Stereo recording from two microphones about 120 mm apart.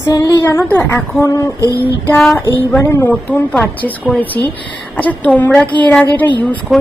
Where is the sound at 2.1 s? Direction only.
10° left (ahead or behind).